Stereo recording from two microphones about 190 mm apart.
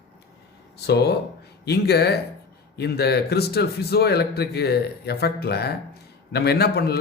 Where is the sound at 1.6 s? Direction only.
60° left (ahead or behind).